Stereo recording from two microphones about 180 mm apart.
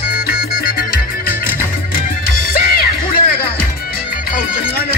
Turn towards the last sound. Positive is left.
turn(degrees=55)  # may be behind; listen again after turning